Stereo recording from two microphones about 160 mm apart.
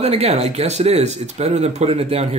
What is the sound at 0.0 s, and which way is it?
Speech, 40° right (ahead or behind).